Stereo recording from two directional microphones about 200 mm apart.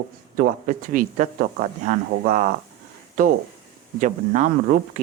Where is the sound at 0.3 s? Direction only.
45° right (ahead or behind).